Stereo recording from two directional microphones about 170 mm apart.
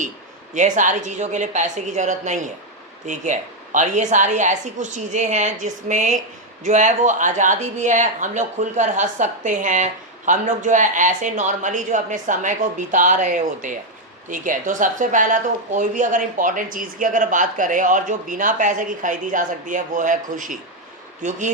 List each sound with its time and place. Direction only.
0.5 s speech: 45° right (ahead or behind)